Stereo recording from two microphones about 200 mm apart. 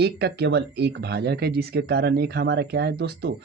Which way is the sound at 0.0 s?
55° right (ahead or behind).